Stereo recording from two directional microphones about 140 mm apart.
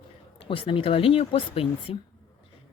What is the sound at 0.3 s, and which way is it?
Speech, 40° left (ahead or behind).